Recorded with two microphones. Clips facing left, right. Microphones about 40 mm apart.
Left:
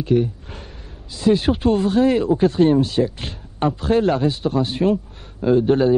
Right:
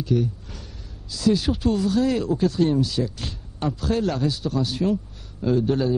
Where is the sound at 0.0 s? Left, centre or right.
Left.